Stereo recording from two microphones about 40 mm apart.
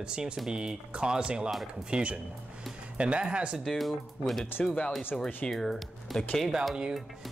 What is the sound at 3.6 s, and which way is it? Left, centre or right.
Speech, centre.